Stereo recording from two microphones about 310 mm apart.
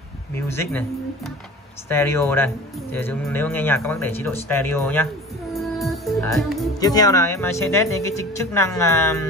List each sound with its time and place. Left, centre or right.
0.5 s speech: centre
5.5 s music: centre
6.8 s speech: centre